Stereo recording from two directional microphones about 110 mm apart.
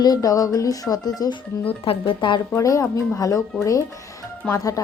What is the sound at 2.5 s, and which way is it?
Speech, 30° left (ahead or behind).